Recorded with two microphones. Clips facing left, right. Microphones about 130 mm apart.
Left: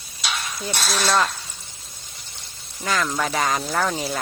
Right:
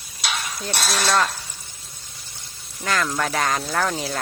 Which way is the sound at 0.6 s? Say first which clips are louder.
Even; centre (ahead or behind).